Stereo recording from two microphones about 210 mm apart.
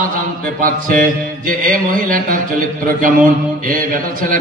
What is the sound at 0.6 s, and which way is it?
Mantra, 40° right (ahead or behind).